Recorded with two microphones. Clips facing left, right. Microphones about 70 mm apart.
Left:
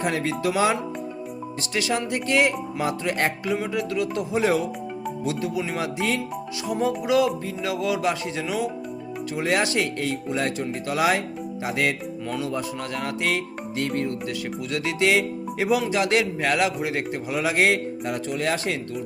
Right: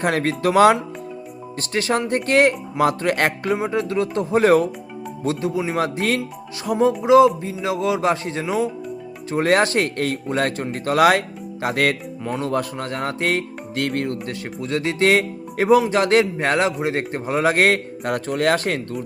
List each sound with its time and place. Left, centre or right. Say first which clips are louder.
0.0 s speech: right 4 dB; right
1.7 s speech: right 5 dB; right
3.6 s speech: right 4 dB; right
4.4 s speech: right 7 dB; right
5.2 s speech: right 5 dB; right
5.7 s speech: right 4 dB; right
6.7 s speech: right 8 dB; right
9.3 s speech: right 6 dB; right
11.6 s music: right 5 dB; right
12.4 s speech: right 6 dB; right
12.8 s speech: right 3 dB; right
13.7 s music: right 3 dB; right
14.3 s speech: right 2 dB; right